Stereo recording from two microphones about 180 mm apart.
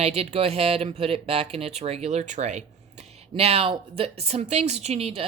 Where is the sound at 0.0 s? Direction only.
35° right (ahead or behind).